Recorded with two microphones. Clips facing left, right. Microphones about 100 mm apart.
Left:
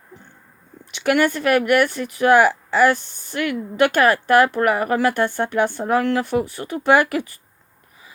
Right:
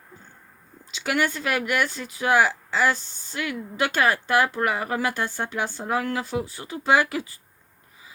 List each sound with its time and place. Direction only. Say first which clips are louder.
0.9 s speech: left 7 dB; 60° left (ahead or behind)